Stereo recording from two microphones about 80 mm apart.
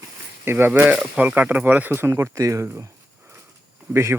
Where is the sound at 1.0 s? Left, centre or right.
Centre; by 2.8 s right.